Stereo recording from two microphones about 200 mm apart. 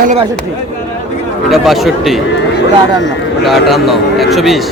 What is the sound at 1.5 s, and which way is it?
Speech, centre (ahead or behind).